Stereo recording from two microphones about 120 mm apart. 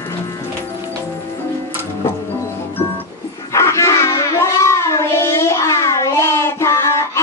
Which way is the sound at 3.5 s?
25° left (ahead or behind).